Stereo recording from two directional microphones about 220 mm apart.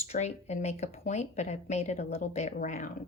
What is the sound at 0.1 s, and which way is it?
Speech, 30° left (ahead or behind).